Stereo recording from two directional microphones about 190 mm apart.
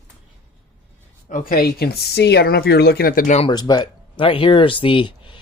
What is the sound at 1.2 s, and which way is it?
Speech, 45° left (ahead or behind).